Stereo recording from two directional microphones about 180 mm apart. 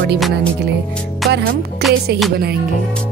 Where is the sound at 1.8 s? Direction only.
65° right (ahead or behind).